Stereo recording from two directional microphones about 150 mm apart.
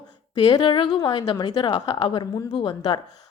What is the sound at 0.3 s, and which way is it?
Speech, 30° left (ahead or behind).